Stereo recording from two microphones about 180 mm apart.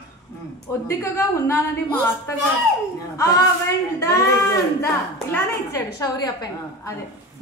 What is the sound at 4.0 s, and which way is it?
A woman's voice, 15° left (ahead or behind).